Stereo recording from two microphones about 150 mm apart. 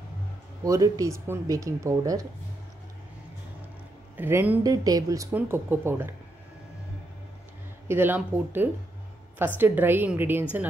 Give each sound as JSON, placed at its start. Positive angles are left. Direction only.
{"t": 0.7, "sound": "speech", "side_deg": -20}
{"t": 4.2, "sound": "speech", "side_deg": -15}
{"t": 4.6, "sound": "speech", "side_deg": -25}
{"t": 7.9, "sound": "speech", "side_deg": -15}